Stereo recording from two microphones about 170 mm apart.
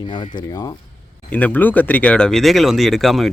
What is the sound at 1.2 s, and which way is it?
Speech, 10° left (ahead or behind).